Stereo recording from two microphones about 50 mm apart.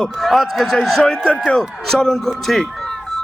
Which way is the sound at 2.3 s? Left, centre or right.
Centre.